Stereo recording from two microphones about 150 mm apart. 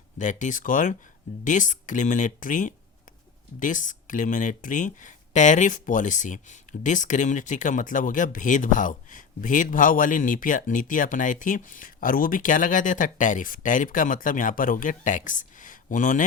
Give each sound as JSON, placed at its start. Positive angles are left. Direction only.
{"t": 0.2, "sound": "speech", "side_deg": 55}